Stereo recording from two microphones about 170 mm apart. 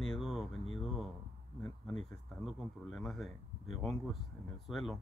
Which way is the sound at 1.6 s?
Centre (ahead or behind).